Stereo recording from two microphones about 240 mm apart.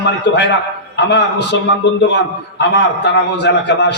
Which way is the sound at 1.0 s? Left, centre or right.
Left.